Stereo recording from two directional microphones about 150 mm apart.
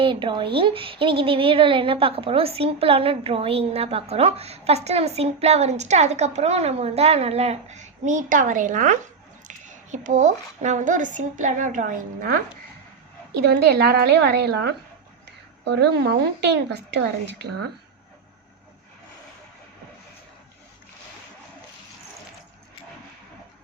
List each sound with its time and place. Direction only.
0.0 s a woman's voice: 35° right (ahead or behind); by 12.4 s 65° right (ahead or behind)
13.4 s a woman's voice: 90° right
15.7 s a woman's voice: 90° right